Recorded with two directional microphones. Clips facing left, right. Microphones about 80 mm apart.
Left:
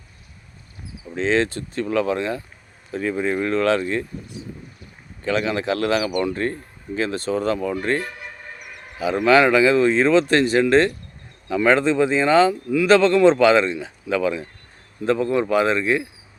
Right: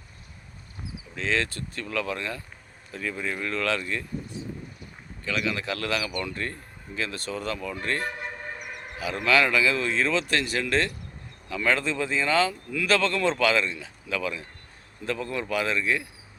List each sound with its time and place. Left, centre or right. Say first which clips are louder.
1.1 s speech: left 8 dB; left
5.2 s speech: left 7 dB; left